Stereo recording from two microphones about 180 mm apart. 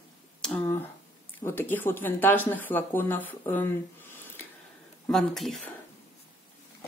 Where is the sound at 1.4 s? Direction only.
10° left (ahead or behind).